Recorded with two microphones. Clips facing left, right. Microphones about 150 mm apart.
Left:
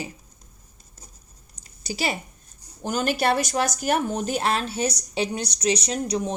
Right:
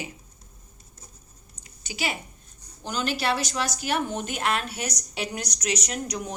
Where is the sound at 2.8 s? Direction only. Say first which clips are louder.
Left 4 dB; 50° left (ahead or behind).